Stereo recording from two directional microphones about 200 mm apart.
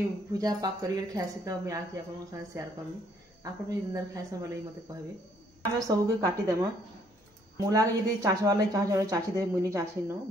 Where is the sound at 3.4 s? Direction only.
15° right (ahead or behind).